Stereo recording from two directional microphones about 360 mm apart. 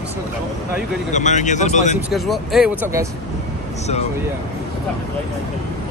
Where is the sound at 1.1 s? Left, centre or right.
Centre.